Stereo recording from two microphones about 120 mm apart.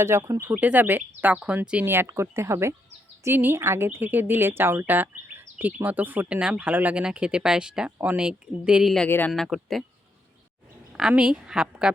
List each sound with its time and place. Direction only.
0.0 s speech: 25° right (ahead or behind)
0.6 s speech: 15° right (ahead or behind)
9.0 s speech: 15° left (ahead or behind)
9.3 s speech: centre (ahead or behind)
11.1 s speech: 5° right (ahead or behind)